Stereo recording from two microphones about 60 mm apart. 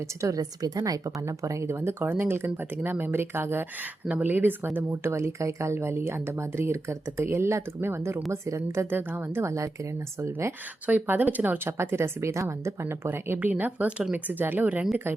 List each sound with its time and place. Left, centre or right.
0.2 s speech: right
4.9 s speech: right
8.9 s speech: right
9.4 s speech: right
10.8 s speech: right